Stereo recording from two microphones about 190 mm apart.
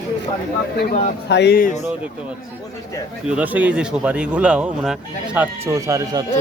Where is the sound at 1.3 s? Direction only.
60° left (ahead or behind).